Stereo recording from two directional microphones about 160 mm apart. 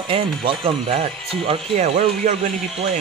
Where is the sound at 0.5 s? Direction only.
35° right (ahead or behind).